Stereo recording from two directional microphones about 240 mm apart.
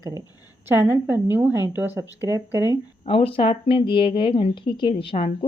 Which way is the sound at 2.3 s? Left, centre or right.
Centre.